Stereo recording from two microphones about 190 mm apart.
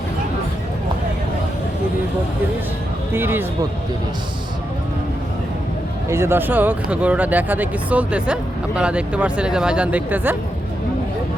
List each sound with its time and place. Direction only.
3.2 s speech: 10° right (ahead or behind)
6.1 s speech: 15° right (ahead or behind)